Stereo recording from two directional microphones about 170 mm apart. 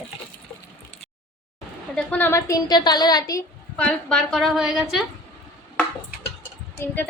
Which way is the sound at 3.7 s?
5° left (ahead or behind).